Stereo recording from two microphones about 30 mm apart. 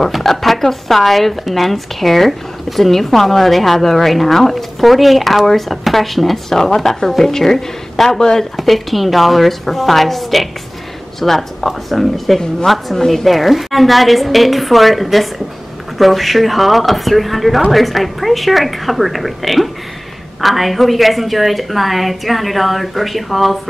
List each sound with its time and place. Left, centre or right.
0.2 s speech: centre
6.5 s a woman's voice: centre
8.2 s speech: centre
8.5 s a woman's voice: centre
13.3 s speech: centre